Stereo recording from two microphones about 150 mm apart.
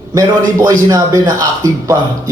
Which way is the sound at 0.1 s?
20° right (ahead or behind).